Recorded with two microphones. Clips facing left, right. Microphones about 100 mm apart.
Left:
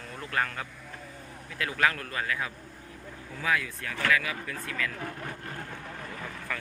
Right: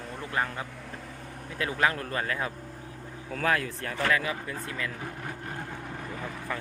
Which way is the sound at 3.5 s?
45° right (ahead or behind).